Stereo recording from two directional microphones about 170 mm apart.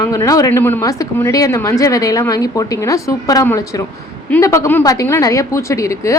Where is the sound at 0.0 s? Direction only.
20° left (ahead or behind).